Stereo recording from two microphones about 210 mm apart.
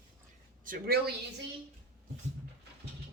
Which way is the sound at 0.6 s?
45° right (ahead or behind).